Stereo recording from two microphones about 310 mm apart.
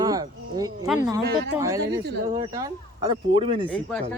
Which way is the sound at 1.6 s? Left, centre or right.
Centre.